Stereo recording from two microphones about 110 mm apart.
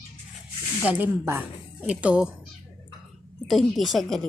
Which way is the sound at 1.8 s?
10° right (ahead or behind).